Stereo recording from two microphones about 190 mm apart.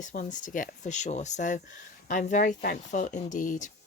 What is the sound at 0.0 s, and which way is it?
Speech, 40° left (ahead or behind).